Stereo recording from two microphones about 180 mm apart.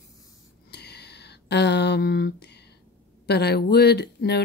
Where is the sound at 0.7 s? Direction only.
65° left (ahead or behind).